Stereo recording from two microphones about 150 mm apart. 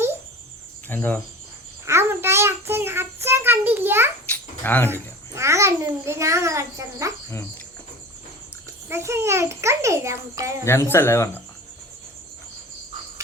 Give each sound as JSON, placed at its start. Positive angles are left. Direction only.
{"t": 0.9, "sound": "speech", "side_deg": 10}
{"t": 1.8, "sound": "a child's voice", "side_deg": -15}
{"t": 4.3, "sound": "dog", "side_deg": 10}
{"t": 4.9, "sound": "a child's voice", "side_deg": -15}
{"t": 8.9, "sound": "a child's voice", "side_deg": -15}
{"t": 10.7, "sound": "speech", "side_deg": 15}